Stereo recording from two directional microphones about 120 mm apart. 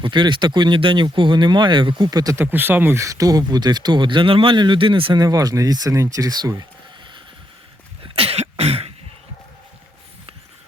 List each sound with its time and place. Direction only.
0.0 s speech: 40° right (ahead or behind)
2.4 s speech: 15° right (ahead or behind); by 5.2 s 45° right (ahead or behind)
5.2 s speech: 30° right (ahead or behind)
8.0 s cough: 55° right (ahead or behind)